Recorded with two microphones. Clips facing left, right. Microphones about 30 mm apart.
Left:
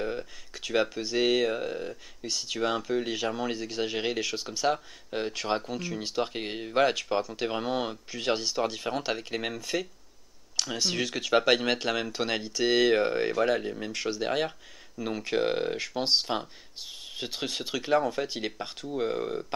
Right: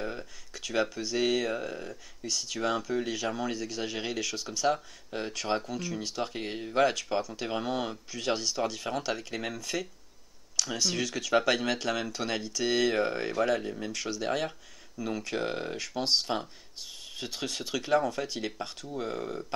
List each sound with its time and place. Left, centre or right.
0.0 s speech: centre